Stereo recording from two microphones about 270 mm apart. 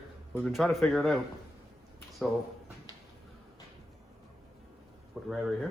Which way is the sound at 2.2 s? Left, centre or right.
Centre.